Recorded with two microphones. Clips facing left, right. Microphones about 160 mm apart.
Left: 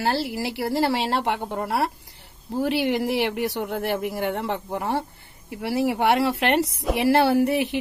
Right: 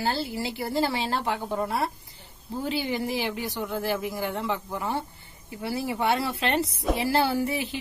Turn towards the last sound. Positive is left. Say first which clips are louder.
# left 7 dB
turn(degrees=70)  # may be behind; listen again after turning